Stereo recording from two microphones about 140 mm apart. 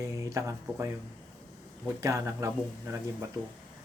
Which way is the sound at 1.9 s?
20° right (ahead or behind).